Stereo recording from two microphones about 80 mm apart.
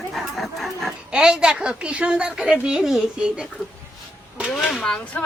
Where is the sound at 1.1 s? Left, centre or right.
Centre.